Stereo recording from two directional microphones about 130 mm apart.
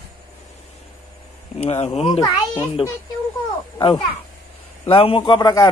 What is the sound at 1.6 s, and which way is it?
Speech, 50° left (ahead or behind).